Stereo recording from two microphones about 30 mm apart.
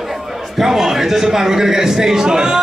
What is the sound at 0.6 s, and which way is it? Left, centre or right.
A man's voice, centre.